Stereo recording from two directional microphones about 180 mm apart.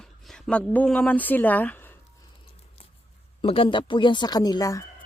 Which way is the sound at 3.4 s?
30° left (ahead or behind).